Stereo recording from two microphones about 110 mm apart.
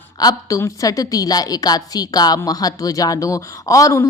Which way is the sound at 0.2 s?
35° left (ahead or behind).